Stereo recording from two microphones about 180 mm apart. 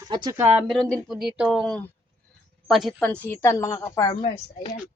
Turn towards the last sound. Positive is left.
turn(degrees=30)  # may be behind; listen again after turning